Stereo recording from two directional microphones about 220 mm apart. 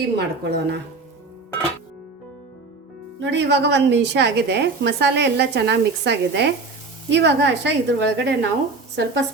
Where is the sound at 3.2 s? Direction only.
55° right (ahead or behind).